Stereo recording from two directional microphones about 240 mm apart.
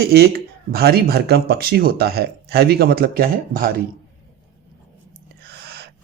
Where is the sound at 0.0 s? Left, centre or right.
Right.